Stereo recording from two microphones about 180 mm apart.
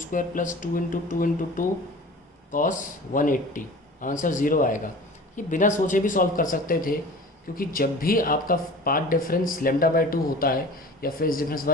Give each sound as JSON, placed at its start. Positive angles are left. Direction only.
{"t": 0.0, "sound": "speech", "side_deg": 45}